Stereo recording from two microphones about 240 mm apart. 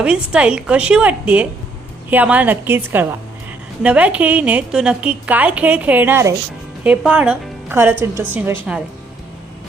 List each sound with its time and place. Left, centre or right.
0.0 s a woman's voice: centre